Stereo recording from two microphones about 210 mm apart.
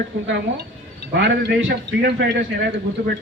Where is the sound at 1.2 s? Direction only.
55° right (ahead or behind).